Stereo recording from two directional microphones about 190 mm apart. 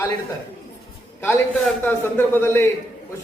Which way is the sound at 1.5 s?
Centre (ahead or behind).